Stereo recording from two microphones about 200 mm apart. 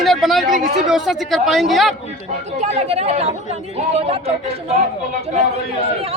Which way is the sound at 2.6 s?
30° right (ahead or behind).